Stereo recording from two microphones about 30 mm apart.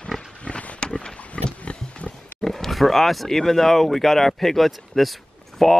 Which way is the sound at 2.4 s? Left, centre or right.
Centre.